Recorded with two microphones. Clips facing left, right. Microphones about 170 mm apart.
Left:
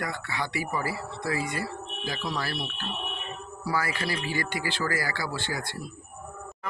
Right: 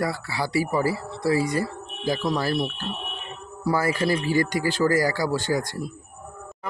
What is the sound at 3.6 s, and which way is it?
A man's voice, 45° right (ahead or behind).